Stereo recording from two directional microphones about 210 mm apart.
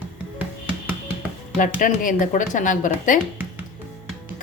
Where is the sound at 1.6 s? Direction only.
40° left (ahead or behind).